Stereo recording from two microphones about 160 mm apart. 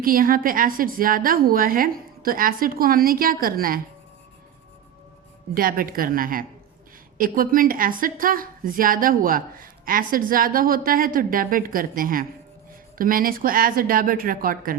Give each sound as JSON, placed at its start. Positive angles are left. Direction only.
{"t": 0.0, "sound": "a woman's voice", "side_deg": -60}
{"t": 5.5, "sound": "a woman's voice", "side_deg": -65}